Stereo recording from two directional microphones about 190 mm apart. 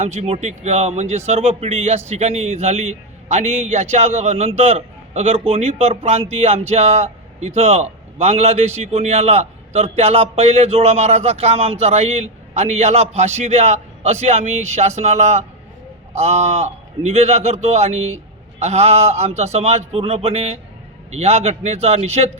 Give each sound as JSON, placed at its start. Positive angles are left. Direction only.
{"t": 0.0, "sound": "a man's voice", "side_deg": -35}